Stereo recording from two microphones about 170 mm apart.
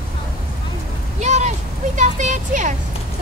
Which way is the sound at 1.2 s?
45° right (ahead or behind).